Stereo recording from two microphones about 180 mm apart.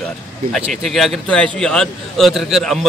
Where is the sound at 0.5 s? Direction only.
Centre (ahead or behind).